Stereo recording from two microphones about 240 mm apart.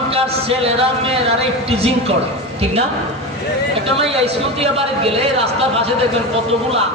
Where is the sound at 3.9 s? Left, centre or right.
Right.